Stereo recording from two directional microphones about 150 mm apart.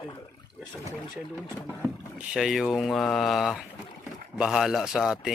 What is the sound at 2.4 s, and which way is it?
Speech, centre (ahead or behind).